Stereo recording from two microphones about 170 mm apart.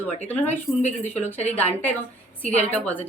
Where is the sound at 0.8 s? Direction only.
40° left (ahead or behind).